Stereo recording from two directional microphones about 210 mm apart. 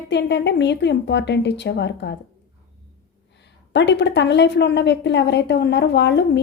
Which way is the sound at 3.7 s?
55° left (ahead or behind).